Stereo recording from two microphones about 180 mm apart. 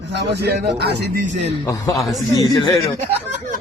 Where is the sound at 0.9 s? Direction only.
50° right (ahead or behind).